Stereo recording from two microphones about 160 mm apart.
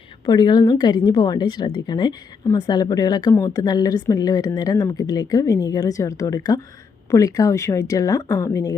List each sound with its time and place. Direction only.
0.3 s speech: 25° left (ahead or behind)